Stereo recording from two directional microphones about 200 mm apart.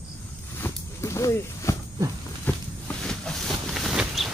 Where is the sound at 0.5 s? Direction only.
15° left (ahead or behind).